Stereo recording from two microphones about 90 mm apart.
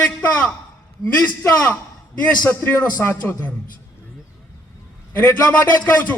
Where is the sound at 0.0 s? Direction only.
15° left (ahead or behind).